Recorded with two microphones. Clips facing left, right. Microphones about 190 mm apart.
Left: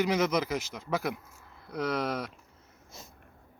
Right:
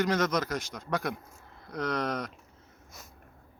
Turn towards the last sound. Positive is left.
turn(degrees=25)  # may be behind; listen again after turning